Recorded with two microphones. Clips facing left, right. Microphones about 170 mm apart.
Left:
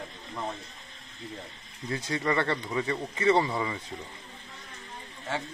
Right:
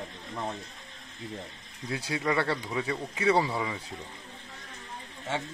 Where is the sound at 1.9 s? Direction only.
5° right (ahead or behind).